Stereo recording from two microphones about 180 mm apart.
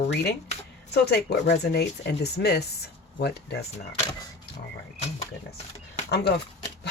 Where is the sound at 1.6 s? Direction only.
65° left (ahead or behind).